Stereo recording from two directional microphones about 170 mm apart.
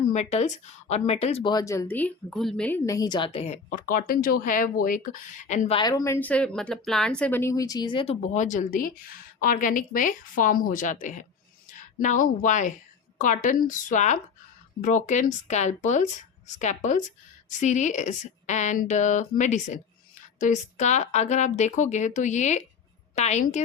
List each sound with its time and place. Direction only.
0.1 s speech: 40° left (ahead or behind)
1.5 s speech: 20° left (ahead or behind); by 5.7 s 45° left (ahead or behind)
5.7 s a woman's voice: 20° left (ahead or behind); by 23.6 s 45° left (ahead or behind)